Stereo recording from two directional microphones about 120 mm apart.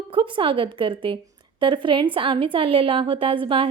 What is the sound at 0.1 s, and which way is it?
A woman's voice, 45° right (ahead or behind).